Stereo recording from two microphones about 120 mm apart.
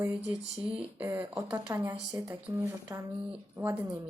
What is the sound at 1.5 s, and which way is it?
Speech, 30° right (ahead or behind).